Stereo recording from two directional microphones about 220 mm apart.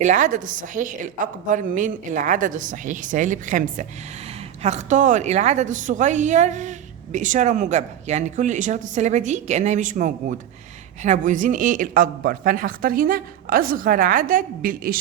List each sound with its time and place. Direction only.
0.0 s a woman's voice: 35° right (ahead or behind)